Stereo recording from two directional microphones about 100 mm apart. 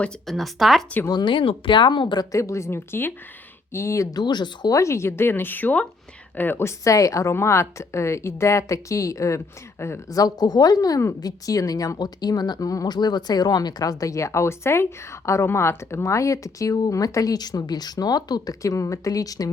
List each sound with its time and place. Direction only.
0.3 s speech: centre (ahead or behind)
1.0 s speech: 50° left (ahead or behind)
2.3 s a woman's voice: 30° left (ahead or behind); by 4.7 s 45° left (ahead or behind)
4.7 s a woman's voice: 30° left (ahead or behind)
10.1 s speech: 40° left (ahead or behind)